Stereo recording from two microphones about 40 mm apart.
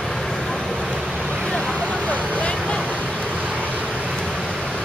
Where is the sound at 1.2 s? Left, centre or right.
Centre.